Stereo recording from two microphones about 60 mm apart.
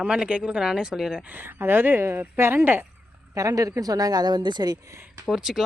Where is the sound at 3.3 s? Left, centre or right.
Right.